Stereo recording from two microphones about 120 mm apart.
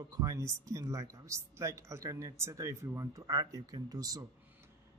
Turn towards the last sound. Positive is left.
turn(degrees=-30)  # may be behind; listen again after turning